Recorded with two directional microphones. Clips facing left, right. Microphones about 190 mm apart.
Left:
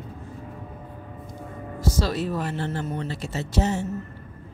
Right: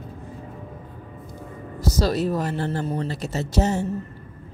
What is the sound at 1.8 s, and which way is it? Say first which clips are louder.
Speech: right 3 dB; 40° right (ahead or behind).